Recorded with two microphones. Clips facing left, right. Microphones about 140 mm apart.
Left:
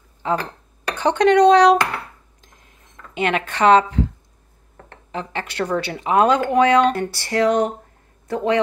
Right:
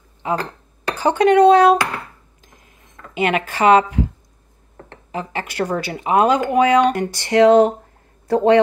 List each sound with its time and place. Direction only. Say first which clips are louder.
0.2 s speech: even; 15° right (ahead or behind)
2.4 s a sound: right 5 dB; 5° right (ahead or behind)
3.2 s speech: right 1 dB; 5° right (ahead or behind)
5.1 s a man's voice: right 2 dB; 5° right (ahead or behind); by 8.5 s 35° right (ahead or behind)